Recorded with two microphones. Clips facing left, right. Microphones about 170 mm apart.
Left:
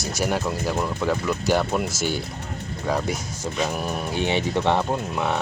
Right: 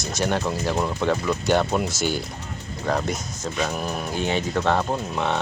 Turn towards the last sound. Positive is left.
turn(degrees=5)  # may be behind; listen again after turning